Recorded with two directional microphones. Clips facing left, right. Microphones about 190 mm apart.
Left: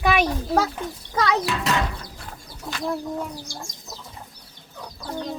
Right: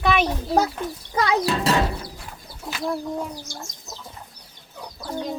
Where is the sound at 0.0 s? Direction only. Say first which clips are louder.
Even; 10° left (ahead or behind).